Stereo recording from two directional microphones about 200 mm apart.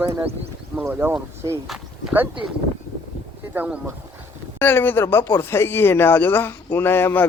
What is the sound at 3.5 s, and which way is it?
Speech, 10° right (ahead or behind).